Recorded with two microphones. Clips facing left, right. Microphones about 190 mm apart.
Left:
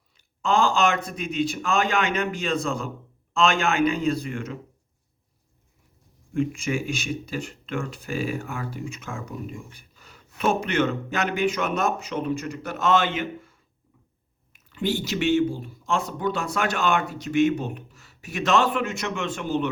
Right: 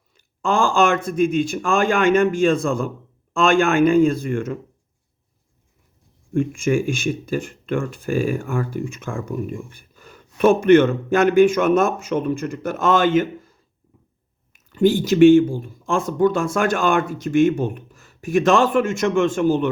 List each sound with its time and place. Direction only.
0.4 s speech: 50° right (ahead or behind)
6.3 s speech: 50° right (ahead or behind)